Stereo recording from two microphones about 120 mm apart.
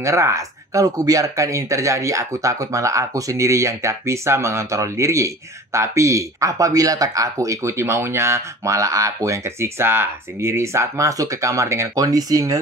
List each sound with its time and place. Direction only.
0.0 s speech: 25° right (ahead or behind)